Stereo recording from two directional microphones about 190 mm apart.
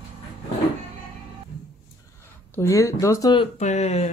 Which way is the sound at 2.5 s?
15° left (ahead or behind).